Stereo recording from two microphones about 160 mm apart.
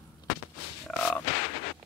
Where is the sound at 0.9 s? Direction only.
5° left (ahead or behind).